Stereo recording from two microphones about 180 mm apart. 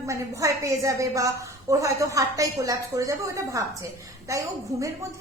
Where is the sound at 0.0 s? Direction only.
15° right (ahead or behind).